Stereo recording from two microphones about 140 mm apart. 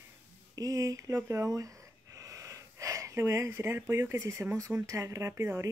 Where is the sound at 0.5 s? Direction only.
25° right (ahead or behind).